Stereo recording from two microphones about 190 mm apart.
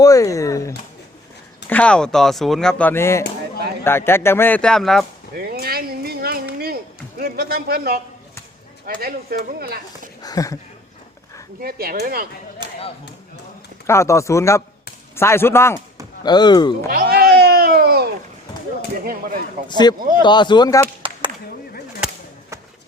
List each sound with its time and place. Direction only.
0.0 s speech: 15° left (ahead or behind)
1.7 s speech: 5° left (ahead or behind)
5.3 s a sound: 50° right (ahead or behind)
8.9 s speech: 50° right (ahead or behind)
10.2 s speech: 20° left (ahead or behind)
11.6 s speech: 50° right (ahead or behind)
12.6 s a sound: 25° right (ahead or behind)
13.8 s speech: 15° left (ahead or behind)
16.9 s a sound: 50° right (ahead or behind)
19.6 s speech: 20° left (ahead or behind)
22.0 s chop: 15° right (ahead or behind)